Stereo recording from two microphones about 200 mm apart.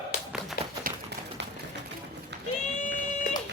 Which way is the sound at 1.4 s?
60° right (ahead or behind).